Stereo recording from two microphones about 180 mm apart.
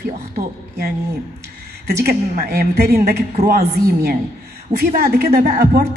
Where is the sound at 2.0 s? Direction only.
60° right (ahead or behind).